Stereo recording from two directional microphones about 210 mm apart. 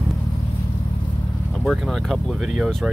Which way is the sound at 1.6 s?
Centre (ahead or behind).